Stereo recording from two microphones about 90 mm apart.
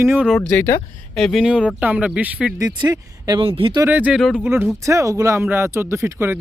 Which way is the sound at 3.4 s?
75° right (ahead or behind).